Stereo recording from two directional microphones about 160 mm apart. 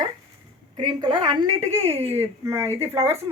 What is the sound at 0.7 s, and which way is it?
Speech, 25° right (ahead or behind).